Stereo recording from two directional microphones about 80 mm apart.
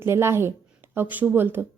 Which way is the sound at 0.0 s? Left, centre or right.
Right.